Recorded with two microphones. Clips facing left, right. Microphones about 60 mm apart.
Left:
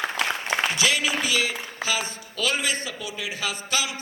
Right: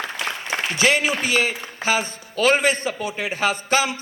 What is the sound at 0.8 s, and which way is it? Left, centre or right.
A man's voice, right.